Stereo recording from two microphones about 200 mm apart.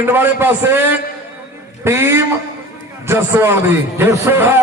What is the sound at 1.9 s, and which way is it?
A man's voice, 10° right (ahead or behind).